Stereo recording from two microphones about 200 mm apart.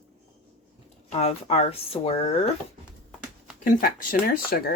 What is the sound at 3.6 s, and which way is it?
Speech, 45° left (ahead or behind).